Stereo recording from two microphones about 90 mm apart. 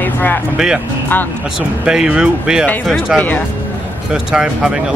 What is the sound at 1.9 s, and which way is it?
Speech, 10° right (ahead or behind).